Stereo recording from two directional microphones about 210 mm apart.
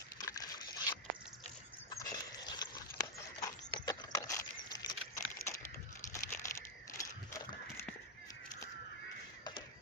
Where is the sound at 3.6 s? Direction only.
20° left (ahead or behind).